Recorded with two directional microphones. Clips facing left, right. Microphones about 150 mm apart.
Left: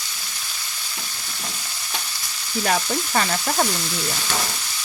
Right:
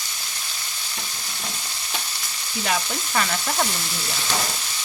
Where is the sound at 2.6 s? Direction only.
40° left (ahead or behind).